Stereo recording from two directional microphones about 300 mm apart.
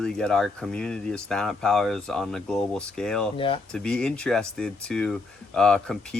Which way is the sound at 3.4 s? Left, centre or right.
Centre.